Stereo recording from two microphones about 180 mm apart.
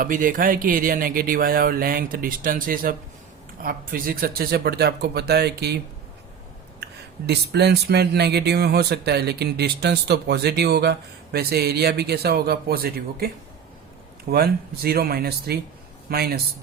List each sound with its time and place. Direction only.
0.0 s speech: 50° right (ahead or behind); by 5.7 s 65° right (ahead or behind)
7.3 s speech: 65° right (ahead or behind)